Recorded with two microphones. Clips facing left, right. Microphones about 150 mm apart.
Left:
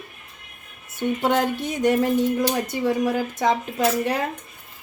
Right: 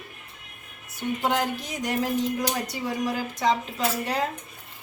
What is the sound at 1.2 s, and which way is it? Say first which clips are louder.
A woman's voice: left 4 dB; 60° left (ahead or behind).